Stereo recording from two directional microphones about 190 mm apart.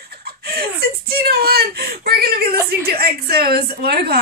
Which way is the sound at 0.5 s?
55° right (ahead or behind).